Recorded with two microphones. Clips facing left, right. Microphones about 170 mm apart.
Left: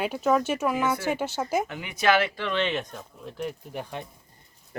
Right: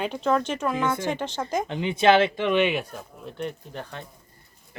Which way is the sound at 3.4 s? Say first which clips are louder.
Even; 5° left (ahead or behind).